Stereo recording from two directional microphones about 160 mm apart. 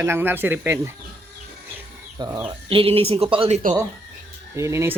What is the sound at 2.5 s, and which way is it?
Speech, 35° right (ahead or behind).